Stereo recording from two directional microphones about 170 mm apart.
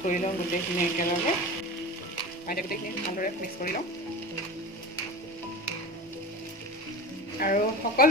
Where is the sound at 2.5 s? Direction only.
55° left (ahead or behind).